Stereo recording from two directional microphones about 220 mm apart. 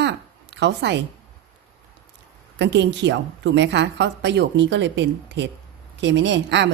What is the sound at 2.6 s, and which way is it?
A woman's voice, 55° right (ahead or behind).